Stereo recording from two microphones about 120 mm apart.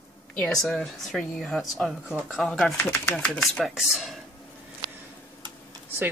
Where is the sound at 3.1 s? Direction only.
Centre (ahead or behind).